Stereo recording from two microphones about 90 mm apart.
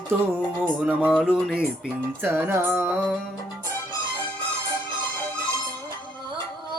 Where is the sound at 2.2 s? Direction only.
25° right (ahead or behind).